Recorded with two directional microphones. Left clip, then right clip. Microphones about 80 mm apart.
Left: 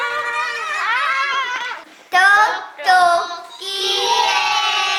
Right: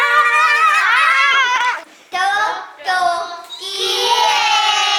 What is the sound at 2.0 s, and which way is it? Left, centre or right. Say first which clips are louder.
Child singing: left 5 dB; left.